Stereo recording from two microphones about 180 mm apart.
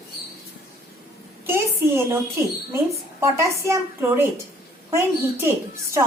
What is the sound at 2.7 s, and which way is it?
A woman's voice, 15° right (ahead or behind).